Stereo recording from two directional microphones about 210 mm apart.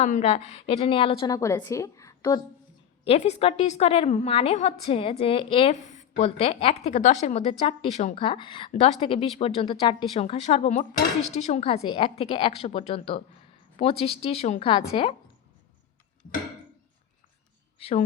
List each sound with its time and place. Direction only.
0.0 s a woman's voice: 30° left (ahead or behind); by 2.4 s 15° left (ahead or behind)
3.0 s a woman's voice: 30° left (ahead or behind)
17.7 s a woman's voice: 30° left (ahead or behind)